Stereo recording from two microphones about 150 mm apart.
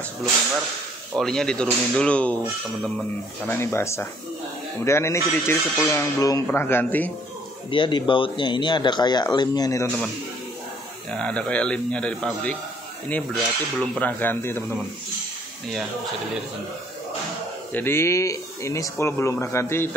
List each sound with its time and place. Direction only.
1.1 s speech: 5° left (ahead or behind)
3.4 s speech: 15° left (ahead or behind)
7.7 s speech: 30° left (ahead or behind)
11.1 s speech: 5° left (ahead or behind)
17.7 s speech: 15° left (ahead or behind)